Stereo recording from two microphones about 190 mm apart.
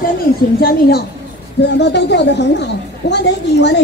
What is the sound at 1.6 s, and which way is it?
A woman's voice, 65° left (ahead or behind).